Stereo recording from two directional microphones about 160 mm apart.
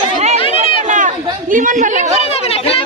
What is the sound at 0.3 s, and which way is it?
Chatter, 35° left (ahead or behind).